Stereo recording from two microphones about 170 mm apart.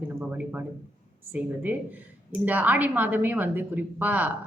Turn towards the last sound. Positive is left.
turn(degrees=-10)  # may be behind; listen again after turning